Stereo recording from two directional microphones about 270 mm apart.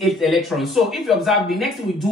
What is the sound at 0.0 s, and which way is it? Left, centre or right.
Speech, centre.